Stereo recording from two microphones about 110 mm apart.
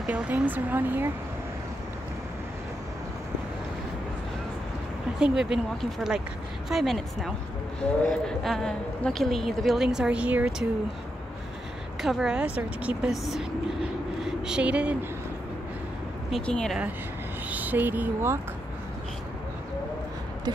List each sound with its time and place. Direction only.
0.0 s speech: 15° right (ahead or behind)
5.2 s speech: 5° right (ahead or behind)
12.0 s a woman's voice: 5° right (ahead or behind)
16.3 s speech: 5° left (ahead or behind)
17.5 s speech: 15° right (ahead or behind)